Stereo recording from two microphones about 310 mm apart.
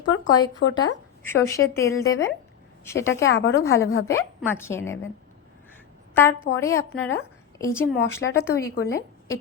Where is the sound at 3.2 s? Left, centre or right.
Left.